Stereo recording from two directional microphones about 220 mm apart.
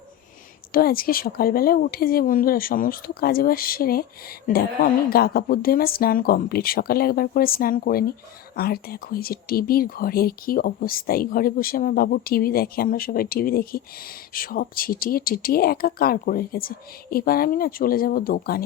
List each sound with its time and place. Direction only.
0.7 s speech: 40° left (ahead or behind)